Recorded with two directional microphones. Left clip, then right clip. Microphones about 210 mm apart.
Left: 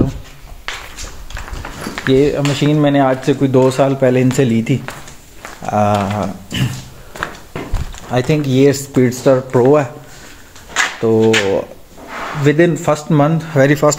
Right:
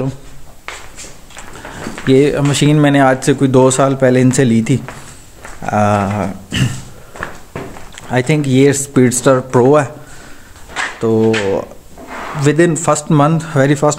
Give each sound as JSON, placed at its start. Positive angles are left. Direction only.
{"t": 0.7, "sound": "a sound", "side_deg": 55}
{"t": 2.1, "sound": "speech", "side_deg": -30}
{"t": 8.1, "sound": "speech", "side_deg": -15}
{"t": 11.0, "sound": "speech", "side_deg": -5}